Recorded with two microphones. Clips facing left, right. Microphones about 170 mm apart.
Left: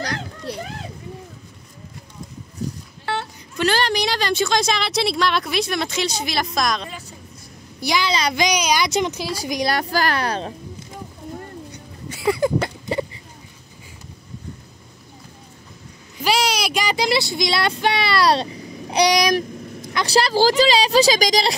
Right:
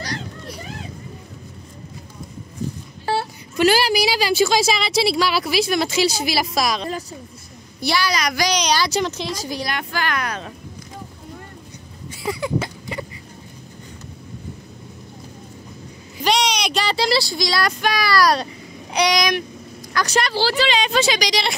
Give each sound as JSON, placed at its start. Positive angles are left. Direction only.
{"t": 3.5, "sound": "a woman's voice", "side_deg": -10}
{"t": 6.9, "sound": "speech", "side_deg": -40}
{"t": 7.8, "sound": "a woman's voice", "side_deg": 20}
{"t": 8.5, "sound": "a woman's voice", "side_deg": 10}
{"t": 9.7, "sound": "a woman's voice", "side_deg": 35}
{"t": 12.1, "sound": "a sound", "side_deg": 65}
{"t": 16.3, "sound": "a woman's voice", "side_deg": 5}